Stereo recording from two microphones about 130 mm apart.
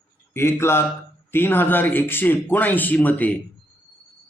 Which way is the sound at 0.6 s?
20° left (ahead or behind).